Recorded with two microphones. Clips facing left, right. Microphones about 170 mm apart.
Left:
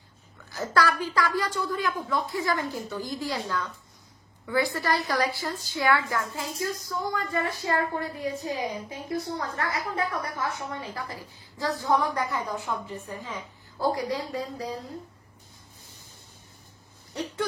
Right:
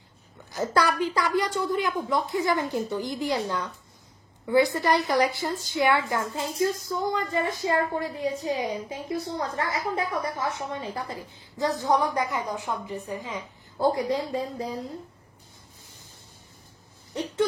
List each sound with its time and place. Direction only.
0.5 s a woman's voice: 20° right (ahead or behind)